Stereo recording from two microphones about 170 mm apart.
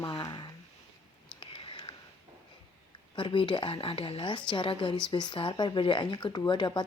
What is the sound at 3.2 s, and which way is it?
Speech, 30° left (ahead or behind).